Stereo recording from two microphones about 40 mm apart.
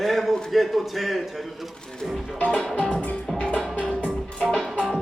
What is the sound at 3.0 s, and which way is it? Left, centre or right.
Music, left.